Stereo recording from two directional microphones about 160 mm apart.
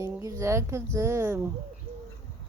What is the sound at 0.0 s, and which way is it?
Speech, 20° right (ahead or behind).